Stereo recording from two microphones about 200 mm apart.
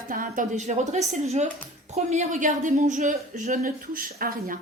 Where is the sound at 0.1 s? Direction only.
45° right (ahead or behind).